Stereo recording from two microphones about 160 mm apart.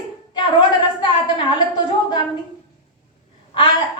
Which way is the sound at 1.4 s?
30° left (ahead or behind).